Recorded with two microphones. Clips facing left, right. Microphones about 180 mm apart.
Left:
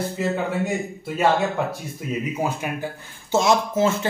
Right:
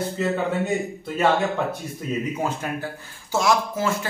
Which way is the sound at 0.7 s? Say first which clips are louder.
Right 1 dB; 10° left (ahead or behind).